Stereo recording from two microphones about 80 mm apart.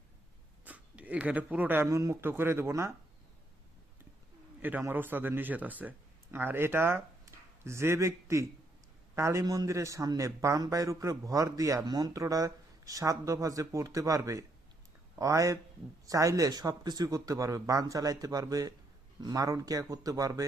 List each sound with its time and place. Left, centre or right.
0.6 s speech: centre
1.9 s speech: right
2.2 s speech: right
4.9 s a man's voice: right
9.4 s a man's voice: right
11.9 s a man's voice: right